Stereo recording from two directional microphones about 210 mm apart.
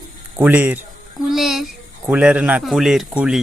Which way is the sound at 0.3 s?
10° right (ahead or behind).